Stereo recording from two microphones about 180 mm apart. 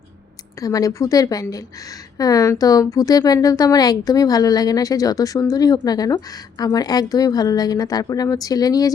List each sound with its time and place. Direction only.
0.6 s a woman's voice: 20° left (ahead or behind)